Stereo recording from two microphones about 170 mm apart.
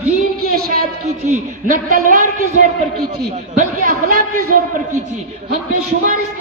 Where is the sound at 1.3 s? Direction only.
50° right (ahead or behind).